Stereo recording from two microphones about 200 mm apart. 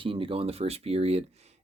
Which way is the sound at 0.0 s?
25° right (ahead or behind).